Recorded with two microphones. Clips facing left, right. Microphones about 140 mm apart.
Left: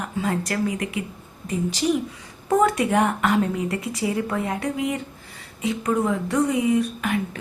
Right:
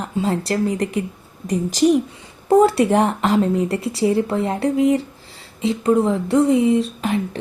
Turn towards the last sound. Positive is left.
turn(degrees=-30)  # may be behind; listen again after turning